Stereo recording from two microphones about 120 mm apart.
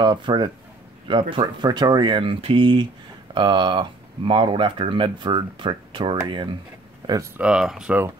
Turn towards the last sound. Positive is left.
turn(degrees=-5)  # may be behind; listen again after turning